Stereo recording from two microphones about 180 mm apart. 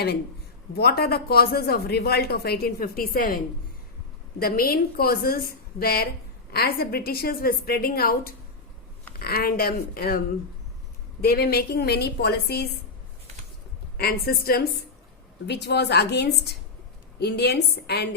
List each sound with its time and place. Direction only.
0.8 s speech: 60° left (ahead or behind)
13.9 s a woman's voice: 55° left (ahead or behind)